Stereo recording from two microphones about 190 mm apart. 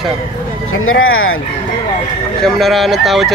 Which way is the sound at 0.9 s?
90° left.